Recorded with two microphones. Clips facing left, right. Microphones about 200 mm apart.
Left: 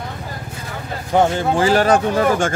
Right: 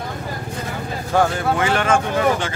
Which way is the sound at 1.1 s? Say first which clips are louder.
Left 2 dB; 20° left (ahead or behind).